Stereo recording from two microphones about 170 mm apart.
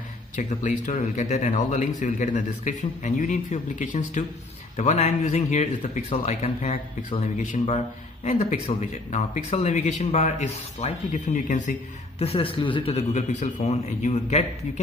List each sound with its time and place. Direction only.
0.4 s speech: 45° left (ahead or behind)
12.2 s a man's voice: 35° left (ahead or behind)